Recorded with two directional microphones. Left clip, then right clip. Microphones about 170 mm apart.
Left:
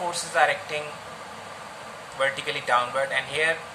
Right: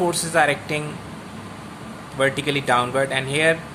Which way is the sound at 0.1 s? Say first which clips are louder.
Right 3 dB; 50° right (ahead or behind).